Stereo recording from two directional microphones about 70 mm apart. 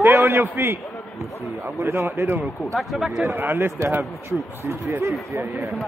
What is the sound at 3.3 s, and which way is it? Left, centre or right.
A man's voice, right.